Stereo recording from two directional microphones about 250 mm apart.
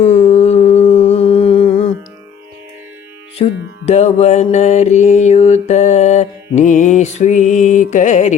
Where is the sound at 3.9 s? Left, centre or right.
Left.